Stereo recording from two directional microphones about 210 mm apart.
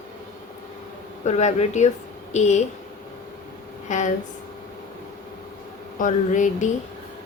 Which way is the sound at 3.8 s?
35° left (ahead or behind).